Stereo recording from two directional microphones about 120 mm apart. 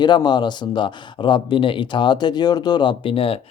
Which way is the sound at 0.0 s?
40° left (ahead or behind).